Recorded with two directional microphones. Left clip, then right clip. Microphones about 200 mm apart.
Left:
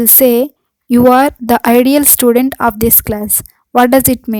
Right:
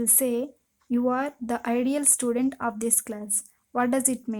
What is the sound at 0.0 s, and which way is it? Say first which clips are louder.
A woman's voice: left 17 dB; 45° left (ahead or behind).